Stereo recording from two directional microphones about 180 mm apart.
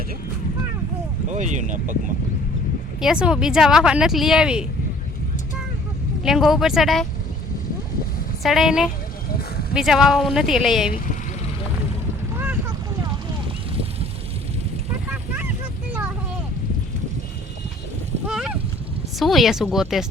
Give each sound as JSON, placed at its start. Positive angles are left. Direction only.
{"t": 1.3, "sound": "speech", "side_deg": -40}
{"t": 3.0, "sound": "a woman's voice", "side_deg": -5}
{"t": 6.2, "sound": "a woman's voice", "side_deg": 0}
{"t": 8.4, "sound": "a woman's voice", "side_deg": 0}
{"t": 18.3, "sound": "a sound", "side_deg": 0}
{"t": 19.2, "sound": "a woman's voice", "side_deg": 0}